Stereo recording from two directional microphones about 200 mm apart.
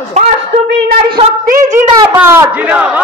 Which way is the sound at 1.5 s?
40° right (ahead or behind).